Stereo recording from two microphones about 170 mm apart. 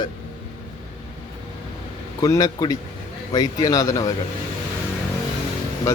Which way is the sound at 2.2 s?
20° left (ahead or behind).